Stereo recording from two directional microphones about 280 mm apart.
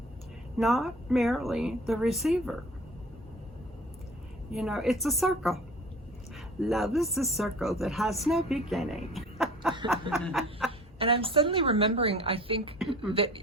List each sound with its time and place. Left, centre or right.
0.6 s speech: centre
4.5 s speech: centre
6.6 s speech: centre
9.1 s a sound: centre
10.1 s speech: centre
10.7 s a woman's voice: centre